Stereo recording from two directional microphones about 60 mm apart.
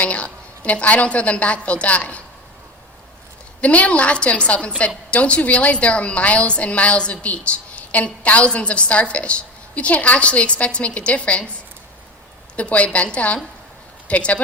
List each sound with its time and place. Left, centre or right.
0.0 s a woman's voice: left
3.6 s a woman's voice: left
12.5 s a woman's voice: left